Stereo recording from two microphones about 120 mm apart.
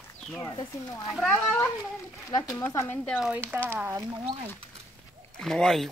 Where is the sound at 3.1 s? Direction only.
10° right (ahead or behind).